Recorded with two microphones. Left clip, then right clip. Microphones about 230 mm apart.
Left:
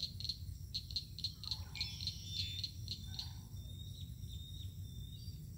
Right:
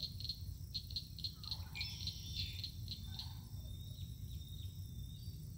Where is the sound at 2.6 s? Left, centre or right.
Left.